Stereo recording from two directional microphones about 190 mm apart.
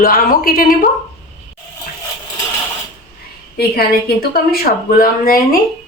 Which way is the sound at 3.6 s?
55° left (ahead or behind).